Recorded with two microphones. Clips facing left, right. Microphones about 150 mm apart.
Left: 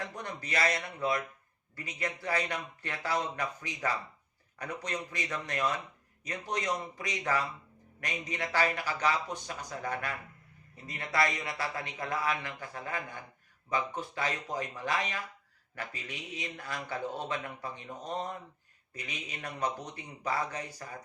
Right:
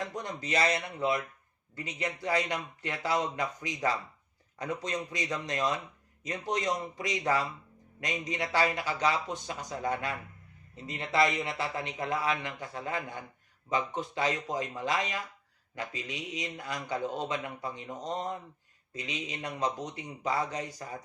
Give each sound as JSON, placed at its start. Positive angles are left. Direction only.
{"t": 0.0, "sound": "a man's voice", "side_deg": -20}